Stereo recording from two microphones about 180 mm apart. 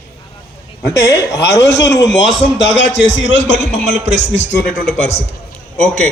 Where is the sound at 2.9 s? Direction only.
75° left (ahead or behind).